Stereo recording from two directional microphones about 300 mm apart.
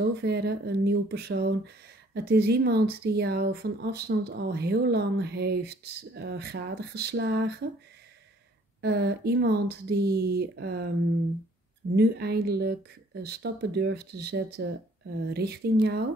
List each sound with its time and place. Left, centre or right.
0.2 s speech: right
8.8 s speech: right
11.9 s speech: right